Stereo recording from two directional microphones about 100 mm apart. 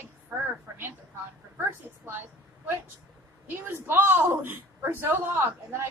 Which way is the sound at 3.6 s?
20° right (ahead or behind).